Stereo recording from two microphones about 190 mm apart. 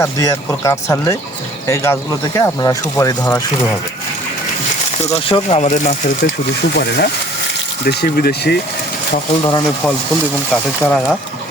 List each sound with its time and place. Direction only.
0.0 s speech: 15° left (ahead or behind)
5.1 s speech: 30° left (ahead or behind)
6.7 s speech: 60° left (ahead or behind)
9.4 s speech: 25° left (ahead or behind)
10.5 s speech: 5° left (ahead or behind)